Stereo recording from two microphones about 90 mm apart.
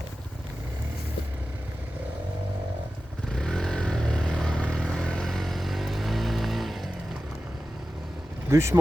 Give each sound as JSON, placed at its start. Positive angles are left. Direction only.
{"t": 3.2, "sound": "vehicle", "side_deg": 5}
{"t": 8.4, "sound": "speech", "side_deg": -30}